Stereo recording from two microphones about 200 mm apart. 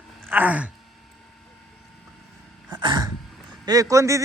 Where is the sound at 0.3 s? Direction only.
10° right (ahead or behind).